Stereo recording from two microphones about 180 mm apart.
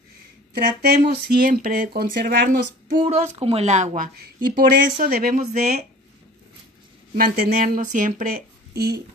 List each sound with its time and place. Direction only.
0.8 s speech: 55° right (ahead or behind)
3.4 s speech: 35° right (ahead or behind)
7.2 s speech: 55° right (ahead or behind)